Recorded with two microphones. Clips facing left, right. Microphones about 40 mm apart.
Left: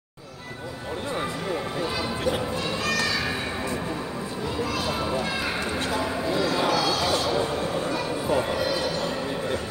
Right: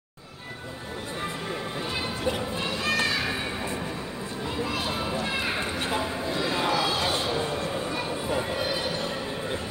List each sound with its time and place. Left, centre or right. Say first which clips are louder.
2.8 s children playing: right 1 dB; right
5.8 s a sound: left 2 dB; right
8.5 s music: left 3 dB; right